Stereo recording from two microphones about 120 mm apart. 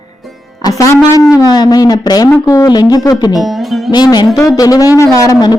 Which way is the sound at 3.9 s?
35° left (ahead or behind).